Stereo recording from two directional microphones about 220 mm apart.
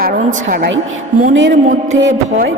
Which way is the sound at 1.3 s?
55° right (ahead or behind).